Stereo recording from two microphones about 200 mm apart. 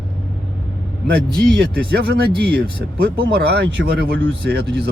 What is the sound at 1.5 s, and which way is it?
Speech, 55° right (ahead or behind).